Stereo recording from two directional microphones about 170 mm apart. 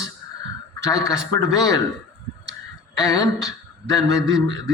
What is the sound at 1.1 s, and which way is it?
Speech, 20° left (ahead or behind).